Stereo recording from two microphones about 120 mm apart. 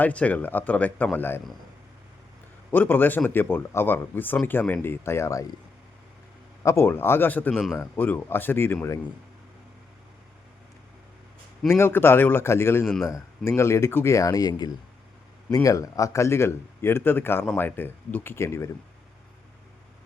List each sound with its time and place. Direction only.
0.0 s speech: 10° left (ahead or behind)
2.6 s a man's voice: 15° left (ahead or behind)
6.6 s a man's voice: 25° left (ahead or behind)
11.7 s a man's voice: 20° left (ahead or behind)